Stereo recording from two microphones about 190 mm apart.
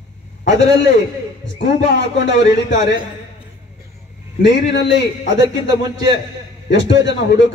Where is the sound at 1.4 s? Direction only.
70° left (ahead or behind).